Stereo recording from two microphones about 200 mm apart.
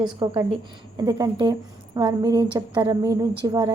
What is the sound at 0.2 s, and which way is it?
A woman's voice, 20° right (ahead or behind).